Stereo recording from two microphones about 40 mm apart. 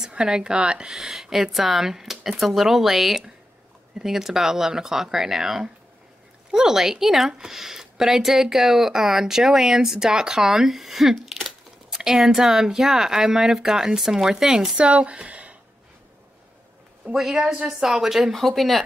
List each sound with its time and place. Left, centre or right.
0.0 s speech: centre
0.9 s speech: centre
14.8 s speech: right
17.1 s speech: centre
18.3 s speech: centre